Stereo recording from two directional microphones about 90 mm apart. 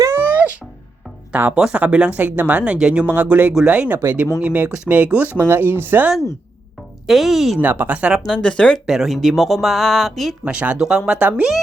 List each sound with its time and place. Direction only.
0.2 s music: 20° right (ahead or behind)
1.3 s speech: 20° right (ahead or behind)
3.2 s speech: 20° right (ahead or behind)
7.1 s speech: 5° right (ahead or behind)
7.6 s speech: 20° right (ahead or behind)
8.3 s speech: 10° left (ahead or behind)
8.9 s speech: centre (ahead or behind)
10.4 s speech: 15° right (ahead or behind)